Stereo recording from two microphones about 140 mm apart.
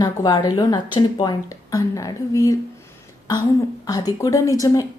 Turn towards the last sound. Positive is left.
turn(degrees=25)  # may be behind; listen again after turning